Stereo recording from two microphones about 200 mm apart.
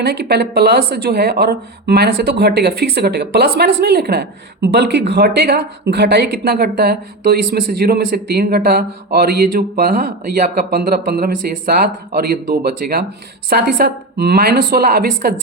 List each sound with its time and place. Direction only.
0.0 s speech: 50° right (ahead or behind)